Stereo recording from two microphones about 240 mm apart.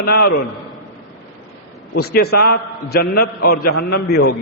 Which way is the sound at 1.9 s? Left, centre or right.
Left.